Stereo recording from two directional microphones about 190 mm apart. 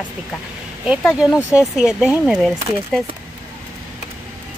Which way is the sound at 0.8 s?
5° right (ahead or behind).